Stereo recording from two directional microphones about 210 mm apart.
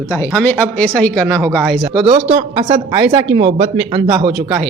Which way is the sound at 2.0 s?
25° right (ahead or behind).